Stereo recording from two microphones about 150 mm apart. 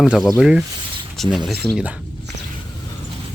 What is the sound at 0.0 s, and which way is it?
Speech, 5° right (ahead or behind).